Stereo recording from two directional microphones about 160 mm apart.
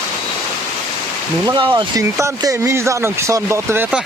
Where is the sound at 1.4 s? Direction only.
25° right (ahead or behind).